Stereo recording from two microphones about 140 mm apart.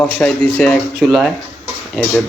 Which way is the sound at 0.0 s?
5° left (ahead or behind).